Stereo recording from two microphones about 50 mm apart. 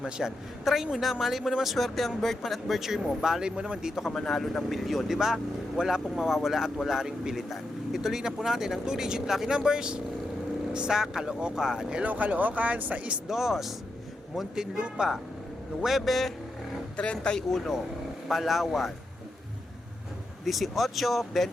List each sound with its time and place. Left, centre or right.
0.0 s speech: centre
4.1 s speech: centre
12.0 s speech: right
13.2 s speech: centre
17.0 s speech: centre
17.5 s speech: centre
20.4 s speech: centre